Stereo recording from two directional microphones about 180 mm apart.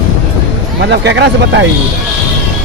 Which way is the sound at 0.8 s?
70° right (ahead or behind).